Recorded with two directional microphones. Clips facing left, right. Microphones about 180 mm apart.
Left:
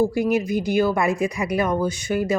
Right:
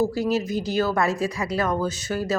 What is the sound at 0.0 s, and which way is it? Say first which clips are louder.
A woman's voice: left 3 dB; 15° left (ahead or behind).